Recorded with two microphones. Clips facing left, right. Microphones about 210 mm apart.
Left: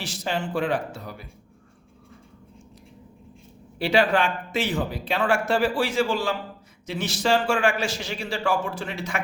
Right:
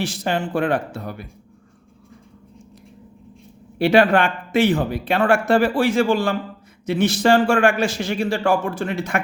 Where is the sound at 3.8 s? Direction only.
55° right (ahead or behind).